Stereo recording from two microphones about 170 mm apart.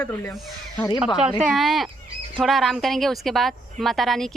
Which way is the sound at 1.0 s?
Centre (ahead or behind).